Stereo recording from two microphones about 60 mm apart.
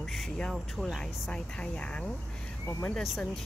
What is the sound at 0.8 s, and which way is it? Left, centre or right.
Speech, centre.